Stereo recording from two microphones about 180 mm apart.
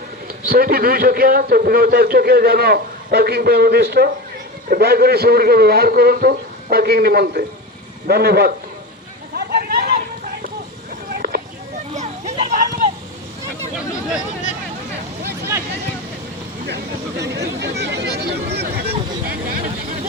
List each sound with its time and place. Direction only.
0.4 s a man's voice: 55° right (ahead or behind)
9.3 s vehicle: 60° right (ahead or behind)
11.9 s a sound: 40° right (ahead or behind)
16.6 s speech: 70° right (ahead or behind)